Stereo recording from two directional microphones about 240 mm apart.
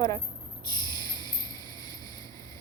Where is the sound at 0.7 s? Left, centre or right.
Centre.